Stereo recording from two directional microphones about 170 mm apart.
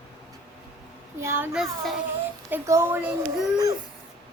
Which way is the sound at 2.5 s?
15° right (ahead or behind).